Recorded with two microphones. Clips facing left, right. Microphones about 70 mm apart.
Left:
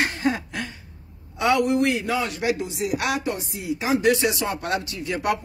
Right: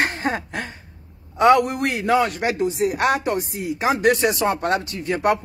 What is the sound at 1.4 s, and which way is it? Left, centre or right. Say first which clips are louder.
A man's voice: right 4 dB; right.